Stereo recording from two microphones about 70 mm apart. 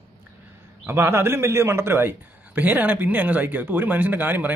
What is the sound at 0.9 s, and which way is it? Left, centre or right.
Speech, right.